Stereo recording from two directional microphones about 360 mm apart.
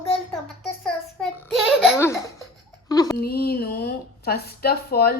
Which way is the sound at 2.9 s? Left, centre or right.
Centre.